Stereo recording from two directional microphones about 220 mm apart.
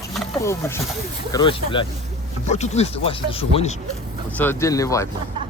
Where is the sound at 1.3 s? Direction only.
20° left (ahead or behind).